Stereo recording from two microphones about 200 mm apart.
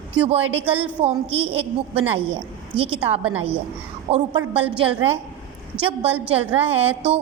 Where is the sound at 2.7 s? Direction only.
25° right (ahead or behind).